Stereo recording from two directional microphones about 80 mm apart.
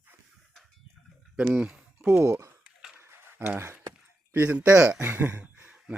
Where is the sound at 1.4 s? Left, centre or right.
Centre.